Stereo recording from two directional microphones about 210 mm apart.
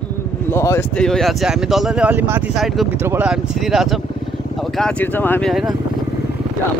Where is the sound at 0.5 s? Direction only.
10° left (ahead or behind).